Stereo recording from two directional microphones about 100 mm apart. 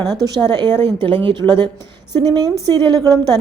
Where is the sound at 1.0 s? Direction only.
55° right (ahead or behind).